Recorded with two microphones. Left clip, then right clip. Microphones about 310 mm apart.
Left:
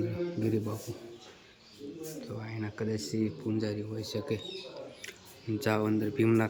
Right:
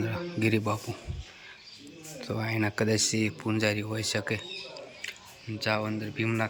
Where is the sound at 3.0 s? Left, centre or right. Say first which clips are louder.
Right 4 dB; centre.